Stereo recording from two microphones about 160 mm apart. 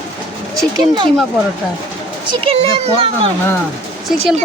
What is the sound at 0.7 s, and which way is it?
Speech, 30° right (ahead or behind).